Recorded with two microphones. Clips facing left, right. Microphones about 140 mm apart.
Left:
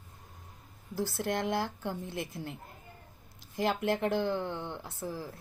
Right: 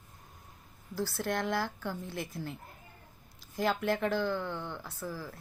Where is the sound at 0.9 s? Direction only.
20° left (ahead or behind).